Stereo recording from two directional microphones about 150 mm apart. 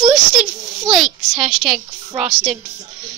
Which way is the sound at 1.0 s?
Centre (ahead or behind).